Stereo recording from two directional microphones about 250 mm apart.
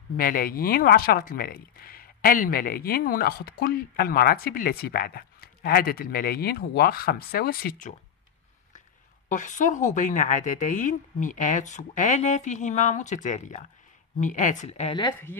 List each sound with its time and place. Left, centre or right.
0.2 s speech: left
9.3 s speech: left